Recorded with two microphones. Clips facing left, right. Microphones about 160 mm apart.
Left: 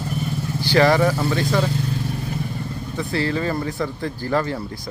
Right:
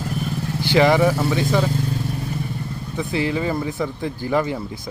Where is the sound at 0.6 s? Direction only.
15° right (ahead or behind).